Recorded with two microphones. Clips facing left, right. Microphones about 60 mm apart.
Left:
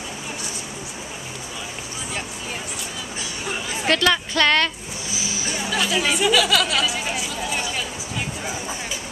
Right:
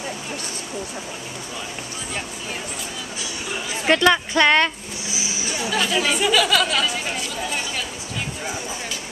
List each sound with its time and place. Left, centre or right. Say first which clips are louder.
3.8 s speech: right 3 dB; centre
5.7 s chatter: right 1 dB; centre